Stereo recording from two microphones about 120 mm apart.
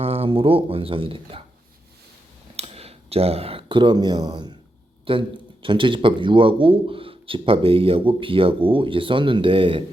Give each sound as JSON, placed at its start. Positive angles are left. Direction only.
{"t": 0.0, "sound": "speech", "side_deg": -55}
{"t": 2.6, "sound": "speech", "side_deg": -55}
{"t": 5.1, "sound": "speech", "side_deg": -45}